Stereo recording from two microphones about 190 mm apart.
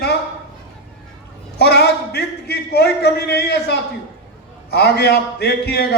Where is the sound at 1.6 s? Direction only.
60° left (ahead or behind).